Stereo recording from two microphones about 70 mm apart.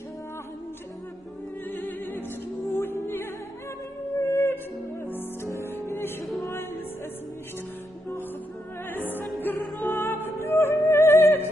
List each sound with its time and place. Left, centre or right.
1.7 s music: left
5.5 s music: left
8.9 s opera: left
9.4 s music: left